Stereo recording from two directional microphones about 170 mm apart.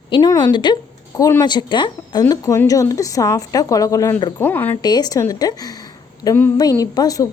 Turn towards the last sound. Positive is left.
turn(degrees=20)  # may be behind; listen again after turning